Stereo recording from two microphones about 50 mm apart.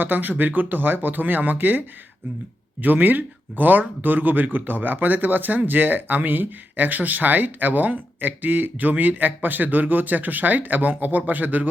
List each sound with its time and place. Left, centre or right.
0.0 s speech: right
2.8 s speech: right